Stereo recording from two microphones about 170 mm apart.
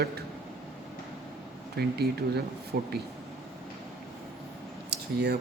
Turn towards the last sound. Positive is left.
turn(degrees=-75)  # may be behind; listen again after turning